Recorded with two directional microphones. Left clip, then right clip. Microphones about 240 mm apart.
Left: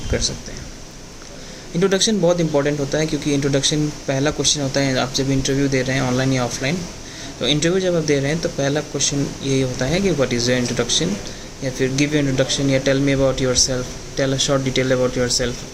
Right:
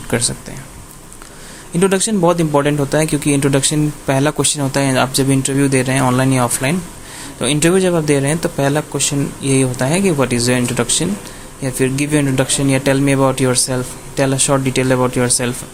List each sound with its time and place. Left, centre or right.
1.8 s speech: right